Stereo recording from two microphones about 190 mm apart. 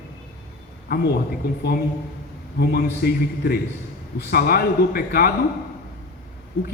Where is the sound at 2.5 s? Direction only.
55° left (ahead or behind).